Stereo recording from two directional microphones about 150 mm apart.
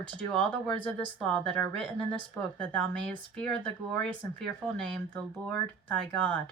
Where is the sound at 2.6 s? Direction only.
5° left (ahead or behind).